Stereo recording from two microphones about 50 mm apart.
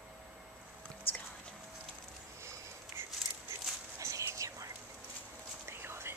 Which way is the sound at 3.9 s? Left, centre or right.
Right.